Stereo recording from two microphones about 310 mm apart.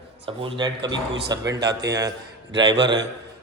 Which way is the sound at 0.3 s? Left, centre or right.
Centre.